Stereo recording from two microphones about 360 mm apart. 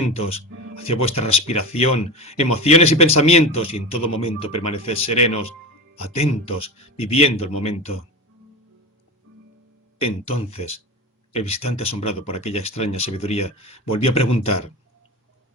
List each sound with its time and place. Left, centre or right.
0.1 s speech: centre
11.3 s speech: centre